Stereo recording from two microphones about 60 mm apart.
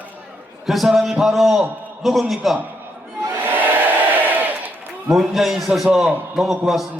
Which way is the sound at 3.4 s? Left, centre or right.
Right.